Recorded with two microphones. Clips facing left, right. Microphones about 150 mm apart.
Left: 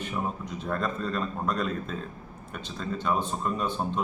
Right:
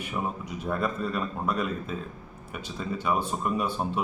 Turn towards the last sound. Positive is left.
turn(degrees=-10)  # may be behind; listen again after turning